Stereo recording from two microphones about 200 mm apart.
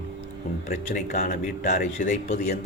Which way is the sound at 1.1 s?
35° left (ahead or behind).